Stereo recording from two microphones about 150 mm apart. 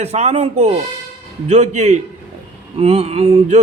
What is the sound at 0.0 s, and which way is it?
A man's voice, 45° right (ahead or behind).